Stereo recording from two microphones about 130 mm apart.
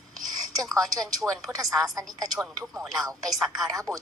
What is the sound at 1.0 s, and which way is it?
Speech, centre (ahead or behind).